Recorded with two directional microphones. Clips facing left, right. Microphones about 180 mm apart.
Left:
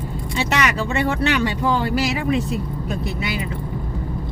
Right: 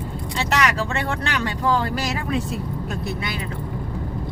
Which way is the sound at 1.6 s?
10° left (ahead or behind).